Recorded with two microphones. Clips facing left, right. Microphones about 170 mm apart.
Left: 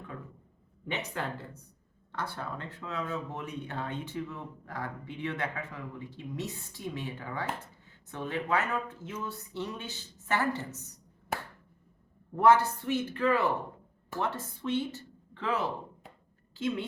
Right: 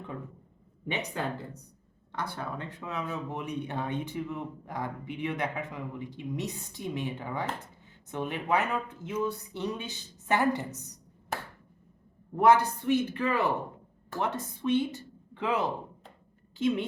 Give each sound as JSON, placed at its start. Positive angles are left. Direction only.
{"t": 0.9, "sound": "speech", "side_deg": -15}
{"t": 12.4, "sound": "a woman's voice", "side_deg": -15}